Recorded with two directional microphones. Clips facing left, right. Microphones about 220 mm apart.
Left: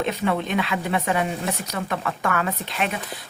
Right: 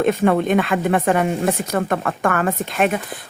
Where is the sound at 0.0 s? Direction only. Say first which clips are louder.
Right 7 dB; 50° right (ahead or behind).